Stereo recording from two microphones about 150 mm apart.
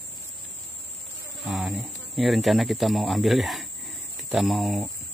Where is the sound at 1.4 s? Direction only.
5° right (ahead or behind).